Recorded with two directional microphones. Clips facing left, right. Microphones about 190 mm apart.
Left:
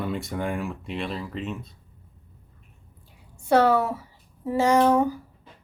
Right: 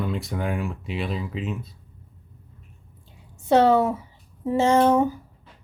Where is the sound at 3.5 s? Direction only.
20° right (ahead or behind).